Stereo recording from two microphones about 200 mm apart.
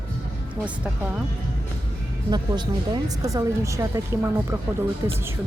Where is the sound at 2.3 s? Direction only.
20° right (ahead or behind).